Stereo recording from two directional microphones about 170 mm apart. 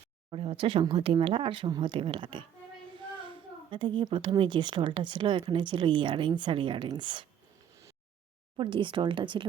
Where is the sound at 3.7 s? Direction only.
30° right (ahead or behind).